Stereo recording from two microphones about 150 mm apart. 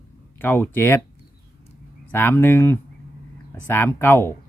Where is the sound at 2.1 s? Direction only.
15° left (ahead or behind).